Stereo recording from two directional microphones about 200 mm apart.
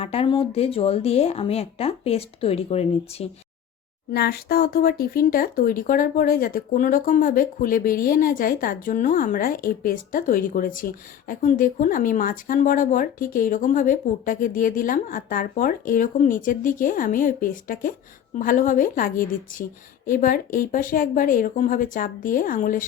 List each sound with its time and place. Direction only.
0.0 s speech: 30° left (ahead or behind)
4.1 s speech: 50° left (ahead or behind)